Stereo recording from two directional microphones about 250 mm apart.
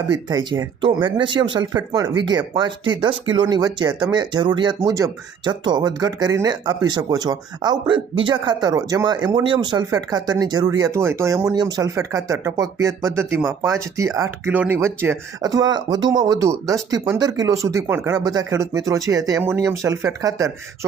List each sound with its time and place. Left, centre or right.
0.1 s speech: centre